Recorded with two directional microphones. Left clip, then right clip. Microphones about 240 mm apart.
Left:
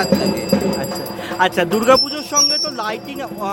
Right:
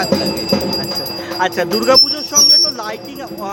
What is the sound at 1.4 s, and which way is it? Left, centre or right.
Speech, centre.